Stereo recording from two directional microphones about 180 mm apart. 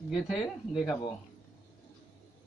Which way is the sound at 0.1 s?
Centre (ahead or behind).